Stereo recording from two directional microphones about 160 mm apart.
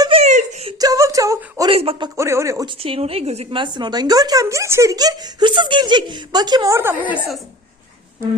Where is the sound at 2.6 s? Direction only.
35° right (ahead or behind); by 7.3 s 10° right (ahead or behind).